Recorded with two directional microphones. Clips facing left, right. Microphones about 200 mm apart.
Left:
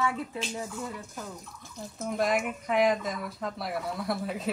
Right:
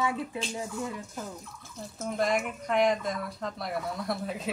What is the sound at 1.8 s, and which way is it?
Speech, centre (ahead or behind).